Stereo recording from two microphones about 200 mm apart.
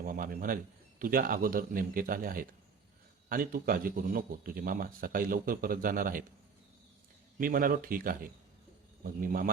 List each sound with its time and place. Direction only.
0.0 s speech: 45° right (ahead or behind)
7.3 s speech: 45° right (ahead or behind)